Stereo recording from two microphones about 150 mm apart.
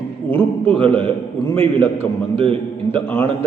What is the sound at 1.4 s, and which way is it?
Speech, 15° left (ahead or behind).